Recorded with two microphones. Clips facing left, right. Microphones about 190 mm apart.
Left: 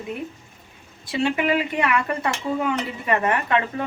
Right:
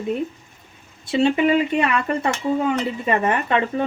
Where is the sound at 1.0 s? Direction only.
25° right (ahead or behind).